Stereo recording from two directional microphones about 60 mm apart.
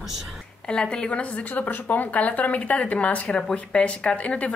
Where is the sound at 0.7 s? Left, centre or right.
Centre.